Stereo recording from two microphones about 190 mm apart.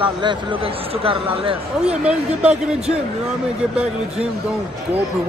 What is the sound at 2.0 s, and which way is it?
Speech, 5° right (ahead or behind).